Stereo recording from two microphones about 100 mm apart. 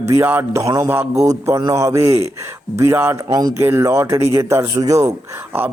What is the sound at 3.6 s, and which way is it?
A man's voice, 25° right (ahead or behind).